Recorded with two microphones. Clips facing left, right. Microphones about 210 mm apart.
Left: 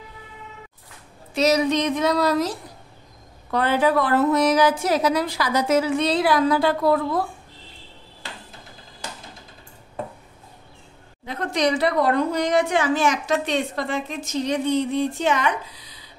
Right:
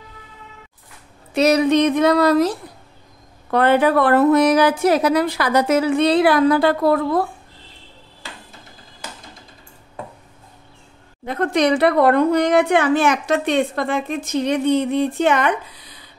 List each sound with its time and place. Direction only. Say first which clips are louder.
1.3 s a woman's voice: right 4 dB; 60° right (ahead or behind)
11.2 s a woman's voice: right 5 dB; 55° right (ahead or behind)